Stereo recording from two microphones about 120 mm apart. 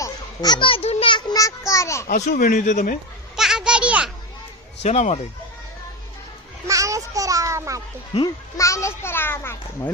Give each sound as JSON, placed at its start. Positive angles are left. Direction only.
{"t": 0.0, "sound": "a sound", "side_deg": 35}
{"t": 0.8, "sound": "speech", "side_deg": 60}
{"t": 1.3, "sound": "a child's voice", "side_deg": 30}
{"t": 2.1, "sound": "speech", "side_deg": 85}
{"t": 3.3, "sound": "children playing", "side_deg": -5}
{"t": 4.8, "sound": "speech", "side_deg": 65}
{"t": 6.7, "sound": "a child's voice", "side_deg": -25}
{"t": 8.5, "sound": "a child's voice", "side_deg": 25}